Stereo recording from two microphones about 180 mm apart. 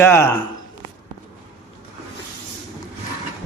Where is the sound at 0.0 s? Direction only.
15° left (ahead or behind).